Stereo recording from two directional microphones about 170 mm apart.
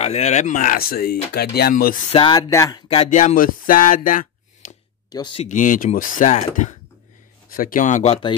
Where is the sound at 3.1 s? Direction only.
45° left (ahead or behind).